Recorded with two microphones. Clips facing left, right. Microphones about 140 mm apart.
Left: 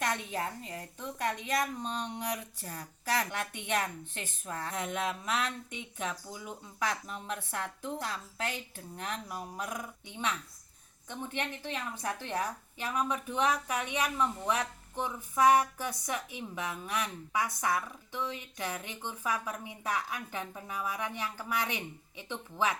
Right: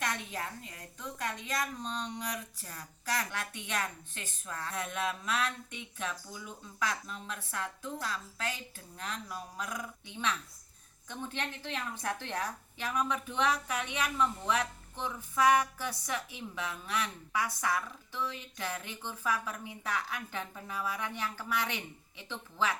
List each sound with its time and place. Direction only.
0.0 s a woman's voice: 20° left (ahead or behind)